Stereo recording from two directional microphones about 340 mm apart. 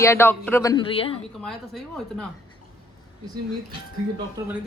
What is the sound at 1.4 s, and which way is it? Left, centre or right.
Speech, centre.